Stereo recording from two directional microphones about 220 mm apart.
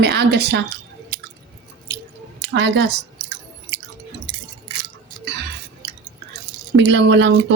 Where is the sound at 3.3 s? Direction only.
55° right (ahead or behind).